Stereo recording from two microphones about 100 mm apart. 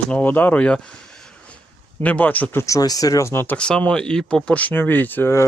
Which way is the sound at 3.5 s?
10° left (ahead or behind).